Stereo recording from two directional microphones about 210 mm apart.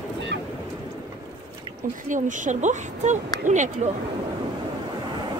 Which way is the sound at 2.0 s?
40° right (ahead or behind).